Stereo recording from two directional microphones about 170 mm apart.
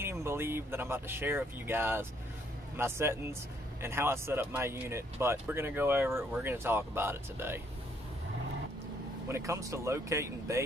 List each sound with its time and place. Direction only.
0.0 s speech: 15° right (ahead or behind)
9.3 s speech: 20° right (ahead or behind)